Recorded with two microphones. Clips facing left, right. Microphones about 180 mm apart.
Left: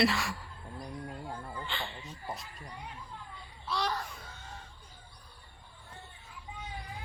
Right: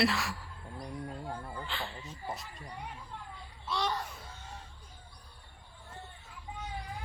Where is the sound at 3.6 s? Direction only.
Centre (ahead or behind).